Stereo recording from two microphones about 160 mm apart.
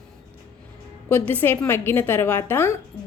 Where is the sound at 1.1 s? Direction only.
10° left (ahead or behind).